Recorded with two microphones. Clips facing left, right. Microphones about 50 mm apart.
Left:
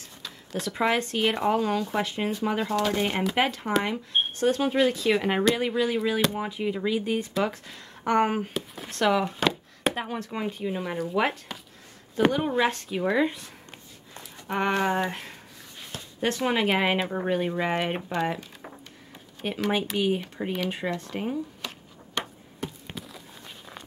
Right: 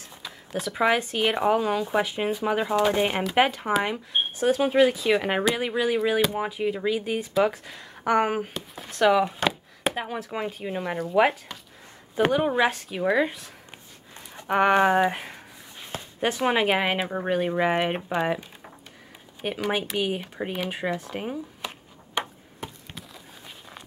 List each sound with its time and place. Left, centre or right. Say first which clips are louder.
0.2 s speech: right 1 dB; centre
10.6 s speech: even; centre
14.1 s speech: right 6 dB; centre
16.6 s speech: even; centre
19.4 s speech: even; centre
22.9 s walk: left 2 dB; centre